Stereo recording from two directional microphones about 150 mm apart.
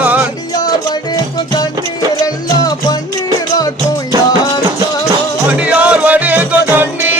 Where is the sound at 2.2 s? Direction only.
25° left (ahead or behind).